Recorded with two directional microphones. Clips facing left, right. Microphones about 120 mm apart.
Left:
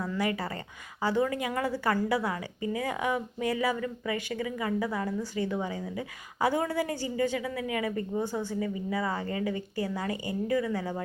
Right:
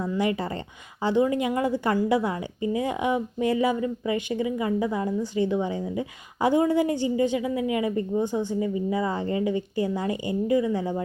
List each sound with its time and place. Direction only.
0.0 s a woman's voice: 25° right (ahead or behind)